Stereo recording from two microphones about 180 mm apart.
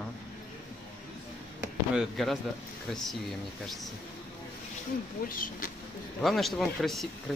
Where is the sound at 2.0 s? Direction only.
Centre (ahead or behind).